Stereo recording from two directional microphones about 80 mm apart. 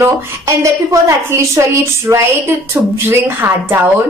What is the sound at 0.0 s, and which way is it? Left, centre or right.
A woman's voice, right.